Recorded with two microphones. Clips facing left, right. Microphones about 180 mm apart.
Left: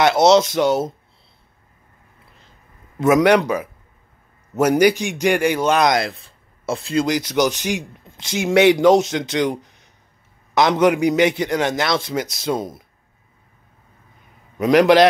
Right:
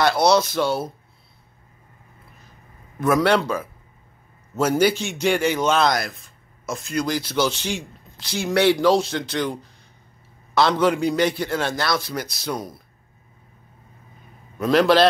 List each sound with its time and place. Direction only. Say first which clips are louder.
0.0 s a man's voice: left 4 dB; 20° left (ahead or behind)
3.0 s a man's voice: left 4 dB; 20° left (ahead or behind)
7.1 s a man's voice: left 2 dB; 15° left (ahead or behind)
14.6 s a man's voice: left 4 dB; 15° left (ahead or behind)